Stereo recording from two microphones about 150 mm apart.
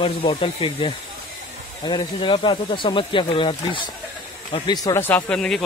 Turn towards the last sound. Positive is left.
turn(degrees=5)  # may be behind; listen again after turning